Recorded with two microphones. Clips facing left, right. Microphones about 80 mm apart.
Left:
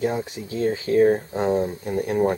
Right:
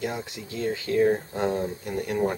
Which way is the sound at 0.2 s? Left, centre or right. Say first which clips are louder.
Left 6 dB; centre.